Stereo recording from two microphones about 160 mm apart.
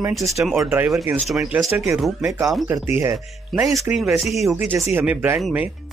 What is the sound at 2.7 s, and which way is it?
Speech, 15° right (ahead or behind).